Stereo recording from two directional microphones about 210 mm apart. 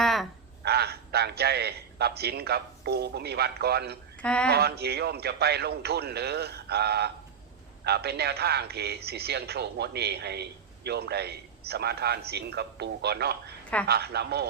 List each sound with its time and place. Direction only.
0.0 s a sound: centre (ahead or behind)
0.6 s a man's voice: 50° right (ahead or behind)
4.2 s speech: 5° left (ahead or behind)
4.4 s a man's voice: 50° right (ahead or behind)